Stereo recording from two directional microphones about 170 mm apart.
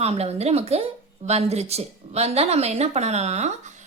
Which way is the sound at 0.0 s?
40° right (ahead or behind).